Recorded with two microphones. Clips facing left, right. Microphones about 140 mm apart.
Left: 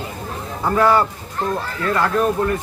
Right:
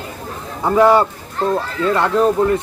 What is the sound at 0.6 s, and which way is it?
Speech, 20° right (ahead or behind).